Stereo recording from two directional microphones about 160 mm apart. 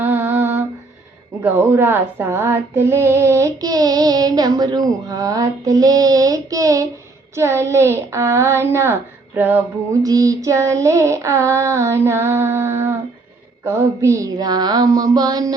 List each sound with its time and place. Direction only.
0.0 s a sound: 10° right (ahead or behind)
1.4 s speech: 15° right (ahead or behind)
7.3 s child singing: 15° right (ahead or behind)
10.0 s child singing: 20° right (ahead or behind)
13.7 s speech: 15° right (ahead or behind)